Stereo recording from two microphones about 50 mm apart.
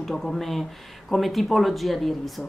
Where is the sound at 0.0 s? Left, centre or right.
Centre.